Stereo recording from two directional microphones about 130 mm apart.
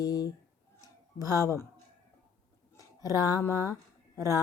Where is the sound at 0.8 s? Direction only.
25° left (ahead or behind).